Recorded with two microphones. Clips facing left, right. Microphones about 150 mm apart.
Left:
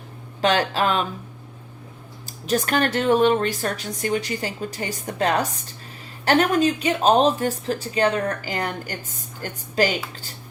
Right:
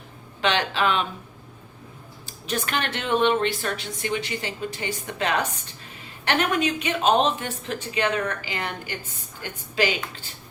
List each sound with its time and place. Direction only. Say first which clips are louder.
0.4 s speech: left 3 dB; 40° left (ahead or behind)
2.2 s speech: left 6 dB; 40° left (ahead or behind)